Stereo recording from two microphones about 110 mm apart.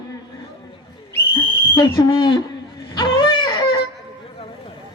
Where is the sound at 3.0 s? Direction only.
45° left (ahead or behind).